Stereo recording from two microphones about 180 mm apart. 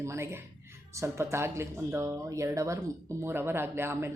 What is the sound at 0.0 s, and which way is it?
Speech, 15° right (ahead or behind).